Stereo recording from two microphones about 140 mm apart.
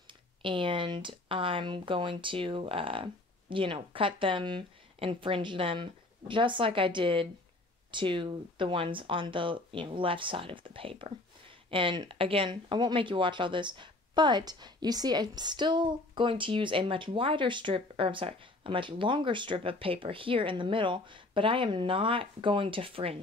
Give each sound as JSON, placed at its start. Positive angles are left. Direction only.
{"t": 0.4, "sound": "speech", "side_deg": -35}